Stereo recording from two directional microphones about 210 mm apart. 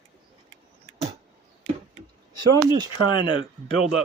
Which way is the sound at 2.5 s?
20° right (ahead or behind).